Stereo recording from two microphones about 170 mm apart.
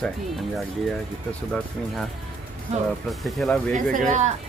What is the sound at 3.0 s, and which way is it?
Speech, centre (ahead or behind).